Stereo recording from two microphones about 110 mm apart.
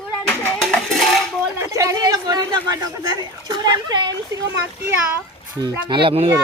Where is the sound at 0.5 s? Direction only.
5° left (ahead or behind).